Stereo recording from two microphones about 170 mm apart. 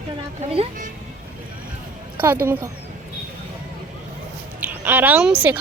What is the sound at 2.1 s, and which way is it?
Speech, 10° right (ahead or behind).